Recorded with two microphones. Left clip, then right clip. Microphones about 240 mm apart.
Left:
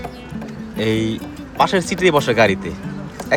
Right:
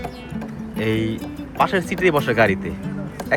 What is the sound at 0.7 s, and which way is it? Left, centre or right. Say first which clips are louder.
Speech: left 3 dB; centre.